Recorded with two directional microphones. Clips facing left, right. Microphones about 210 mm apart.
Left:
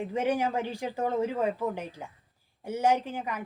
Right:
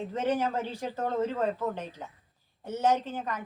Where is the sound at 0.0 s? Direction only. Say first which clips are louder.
Left 1 dB; 10° left (ahead or behind).